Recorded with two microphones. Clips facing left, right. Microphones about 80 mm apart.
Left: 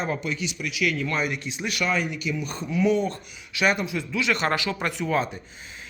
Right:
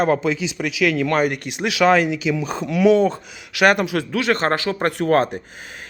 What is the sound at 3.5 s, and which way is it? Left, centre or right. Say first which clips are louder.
Speech: right 7 dB; right.